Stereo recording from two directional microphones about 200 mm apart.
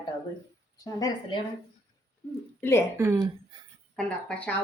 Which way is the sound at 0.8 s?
15° left (ahead or behind).